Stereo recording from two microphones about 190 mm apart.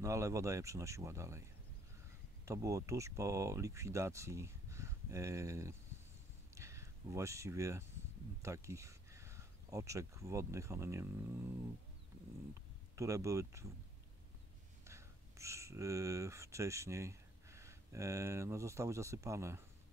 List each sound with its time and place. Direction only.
0.0 s speech: 15° right (ahead or behind)
6.5 s a sound: 15° right (ahead or behind)
8.4 s speech: 15° right (ahead or behind)
12.9 s speech: 15° right (ahead or behind)
14.9 s speech: 15° right (ahead or behind)